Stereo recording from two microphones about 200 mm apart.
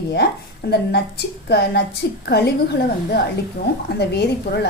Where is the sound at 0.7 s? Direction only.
55° left (ahead or behind).